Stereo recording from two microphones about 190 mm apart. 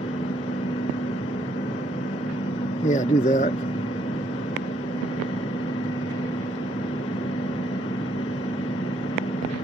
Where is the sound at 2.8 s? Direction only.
40° left (ahead or behind).